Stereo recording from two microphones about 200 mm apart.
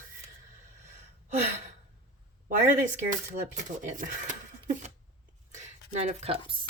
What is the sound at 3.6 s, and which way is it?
Speech, 40° right (ahead or behind).